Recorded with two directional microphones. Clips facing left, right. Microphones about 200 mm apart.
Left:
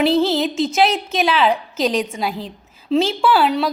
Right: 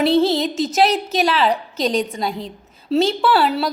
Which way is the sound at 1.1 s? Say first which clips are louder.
Even; centre (ahead or behind).